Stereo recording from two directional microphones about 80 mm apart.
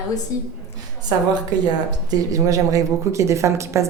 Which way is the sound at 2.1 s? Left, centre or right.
Right.